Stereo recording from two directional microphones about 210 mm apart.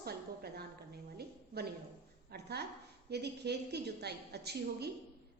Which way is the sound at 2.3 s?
50° right (ahead or behind).